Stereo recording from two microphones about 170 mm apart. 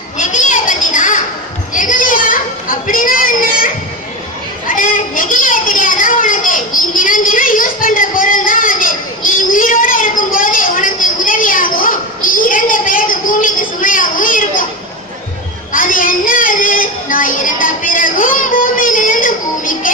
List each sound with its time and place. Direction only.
0.2 s children playing: 45° left (ahead or behind)
1.7 s a sound: 50° left (ahead or behind)
15.7 s child singing: 55° left (ahead or behind)